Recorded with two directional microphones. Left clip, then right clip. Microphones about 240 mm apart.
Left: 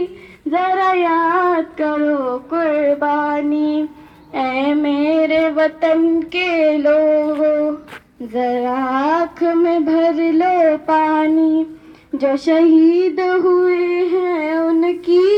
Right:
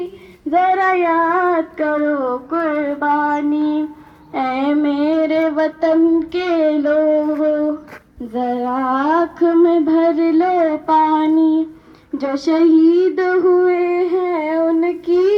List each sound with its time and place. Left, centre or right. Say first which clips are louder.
0.5 s female singing: right 1 dB; left
4.3 s child singing: even; left
7.1 s a sound: left 1 dB; left
7.4 s humming: left 2 dB; left
8.3 s child singing: left 2 dB; centre
10.3 s music: left 2 dB; left
12.3 s a sound: left 1 dB; left